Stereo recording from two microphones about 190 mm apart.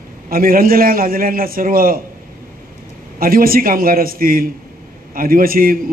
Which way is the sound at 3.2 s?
50° right (ahead or behind).